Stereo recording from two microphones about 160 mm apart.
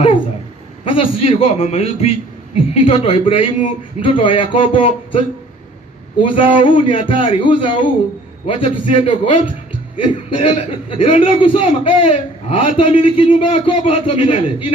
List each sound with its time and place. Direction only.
0.8 s a man's voice: 35° left (ahead or behind)
6.2 s a man's voice: 30° left (ahead or behind)